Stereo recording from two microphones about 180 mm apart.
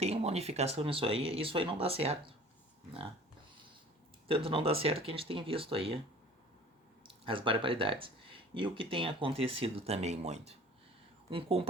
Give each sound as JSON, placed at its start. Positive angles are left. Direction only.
{"t": 0.0, "sound": "speech", "side_deg": -35}
{"t": 4.3, "sound": "speech", "side_deg": -30}
{"t": 7.0, "sound": "speech", "side_deg": -30}